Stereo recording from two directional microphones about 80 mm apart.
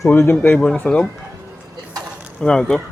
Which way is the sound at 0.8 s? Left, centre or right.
Centre.